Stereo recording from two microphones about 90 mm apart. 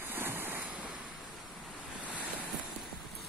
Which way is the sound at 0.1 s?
25° right (ahead or behind).